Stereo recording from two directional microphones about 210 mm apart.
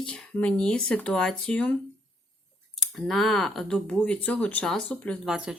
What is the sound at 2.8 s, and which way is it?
Speech, centre (ahead or behind).